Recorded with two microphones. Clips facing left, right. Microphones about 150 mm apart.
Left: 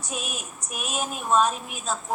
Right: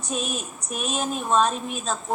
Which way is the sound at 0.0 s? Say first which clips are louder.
Right 5 dB; 10° left (ahead or behind).